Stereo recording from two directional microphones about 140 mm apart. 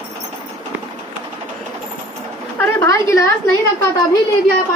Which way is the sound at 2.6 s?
20° left (ahead or behind).